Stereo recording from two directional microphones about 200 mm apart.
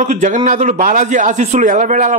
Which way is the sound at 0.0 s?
35° right (ahead or behind).